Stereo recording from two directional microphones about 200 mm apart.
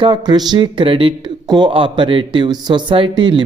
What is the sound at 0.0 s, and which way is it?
Speech, 20° right (ahead or behind).